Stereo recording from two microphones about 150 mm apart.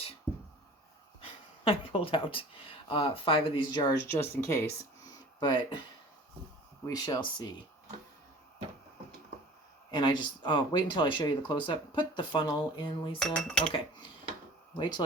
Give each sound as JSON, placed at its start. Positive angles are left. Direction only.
{"t": 1.2, "sound": "speech", "side_deg": 40}
{"t": 4.0, "sound": "speech", "side_deg": 15}
{"t": 5.4, "sound": "speech", "side_deg": 30}
{"t": 6.8, "sound": "speech", "side_deg": 25}
{"t": 9.9, "sound": "speech", "side_deg": 30}
{"t": 13.1, "sound": "cutlery", "side_deg": 5}
{"t": 14.8, "sound": "speech", "side_deg": 30}